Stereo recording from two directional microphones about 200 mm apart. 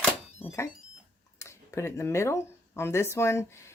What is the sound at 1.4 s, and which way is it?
Speech, 15° left (ahead or behind).